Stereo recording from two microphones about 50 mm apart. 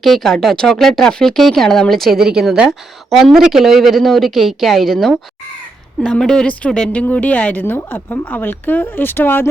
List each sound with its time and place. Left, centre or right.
0.0 s a woman's voice: centre
2.1 s a woman's voice: centre
6.0 s speech: centre
7.0 s speech: left
7.6 s speech: left